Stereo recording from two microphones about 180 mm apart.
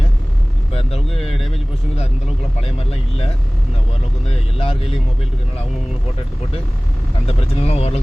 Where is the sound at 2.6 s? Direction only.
30° left (ahead or behind).